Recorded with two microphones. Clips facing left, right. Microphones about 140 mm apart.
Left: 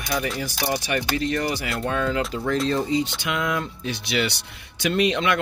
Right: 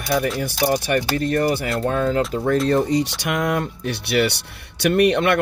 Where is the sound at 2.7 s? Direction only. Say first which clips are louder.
Right 4 dB; 65° right (ahead or behind).